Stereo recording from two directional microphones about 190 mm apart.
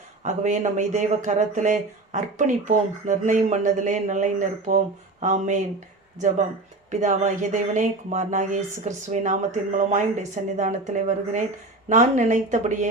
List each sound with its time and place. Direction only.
0.2 s speech: 40° right (ahead or behind)